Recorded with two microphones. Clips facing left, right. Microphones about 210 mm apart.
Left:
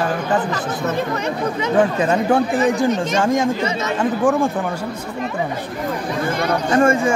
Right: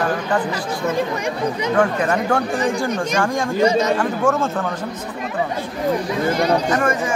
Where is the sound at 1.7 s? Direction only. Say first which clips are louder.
Left 3 dB; 20° left (ahead or behind).